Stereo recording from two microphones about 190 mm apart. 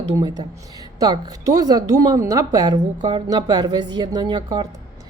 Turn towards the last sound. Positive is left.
turn(degrees=-20)  # may be behind; listen again after turning